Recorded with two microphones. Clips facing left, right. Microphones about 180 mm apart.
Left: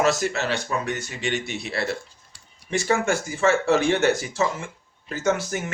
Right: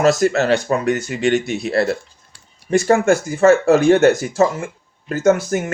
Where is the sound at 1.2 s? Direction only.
45° right (ahead or behind).